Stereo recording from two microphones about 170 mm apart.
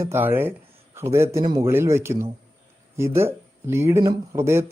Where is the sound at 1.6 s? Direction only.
15° right (ahead or behind).